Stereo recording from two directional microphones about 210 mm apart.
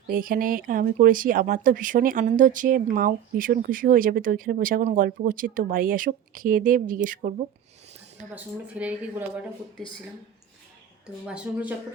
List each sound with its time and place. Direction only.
0.1 s speech: 40° right (ahead or behind)
8.6 s speech: 5° right (ahead or behind)
11.3 s speech: 5° right (ahead or behind)